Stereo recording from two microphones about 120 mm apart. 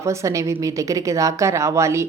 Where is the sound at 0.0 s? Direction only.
25° right (ahead or behind).